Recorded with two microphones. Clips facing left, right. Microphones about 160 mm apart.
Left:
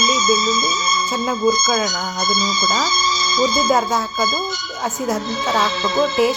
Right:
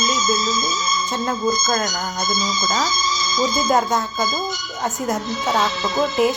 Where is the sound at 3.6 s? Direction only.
Centre (ahead or behind).